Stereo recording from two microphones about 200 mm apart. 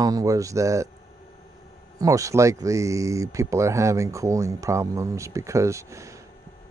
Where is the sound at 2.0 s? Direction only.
15° right (ahead or behind).